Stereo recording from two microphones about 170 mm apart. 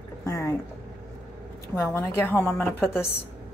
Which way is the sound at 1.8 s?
15° left (ahead or behind).